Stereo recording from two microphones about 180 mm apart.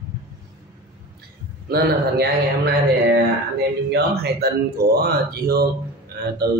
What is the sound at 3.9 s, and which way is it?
Speech, 60° right (ahead or behind).